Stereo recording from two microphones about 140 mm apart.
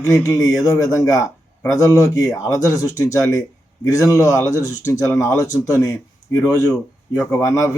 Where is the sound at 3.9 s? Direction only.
25° left (ahead or behind).